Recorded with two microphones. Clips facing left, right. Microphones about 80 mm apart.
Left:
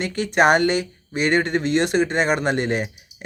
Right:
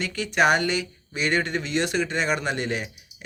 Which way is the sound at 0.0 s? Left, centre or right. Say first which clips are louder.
Left 4 dB; left.